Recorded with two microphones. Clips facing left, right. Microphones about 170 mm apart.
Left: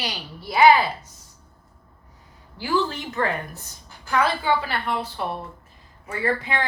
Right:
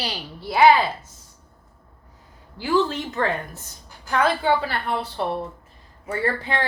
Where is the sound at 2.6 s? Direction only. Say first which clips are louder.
Right 3 dB; 25° right (ahead or behind).